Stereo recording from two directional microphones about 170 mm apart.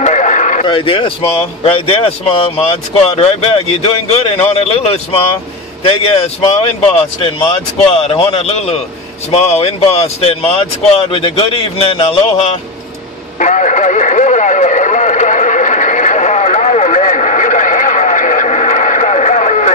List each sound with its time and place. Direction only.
0.0 s sheep: 45° left (ahead or behind)
0.7 s a man's voice: 30° left (ahead or behind)
13.4 s radio: 45° left (ahead or behind)